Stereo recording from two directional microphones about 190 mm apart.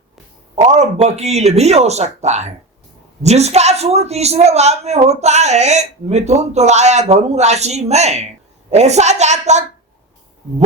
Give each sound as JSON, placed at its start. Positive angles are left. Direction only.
{"t": 0.5, "sound": "a woman's voice", "side_deg": -35}